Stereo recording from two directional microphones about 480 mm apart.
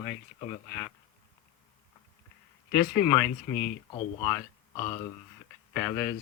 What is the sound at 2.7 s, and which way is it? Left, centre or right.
Speech, centre.